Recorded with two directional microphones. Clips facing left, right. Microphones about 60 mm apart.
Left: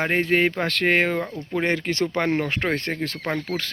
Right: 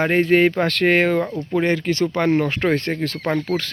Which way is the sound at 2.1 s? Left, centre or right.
Centre.